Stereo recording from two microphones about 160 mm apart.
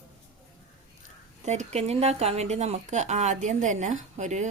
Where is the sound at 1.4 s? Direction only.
45° right (ahead or behind).